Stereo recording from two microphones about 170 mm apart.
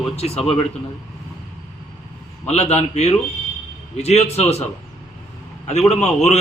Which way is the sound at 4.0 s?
40° left (ahead or behind).